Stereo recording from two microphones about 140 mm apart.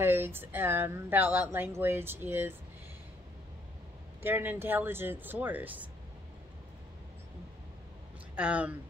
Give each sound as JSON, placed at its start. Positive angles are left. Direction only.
{"t": 0.0, "sound": "speech", "side_deg": -15}
{"t": 4.2, "sound": "speech", "side_deg": -15}
{"t": 8.4, "sound": "speech", "side_deg": -10}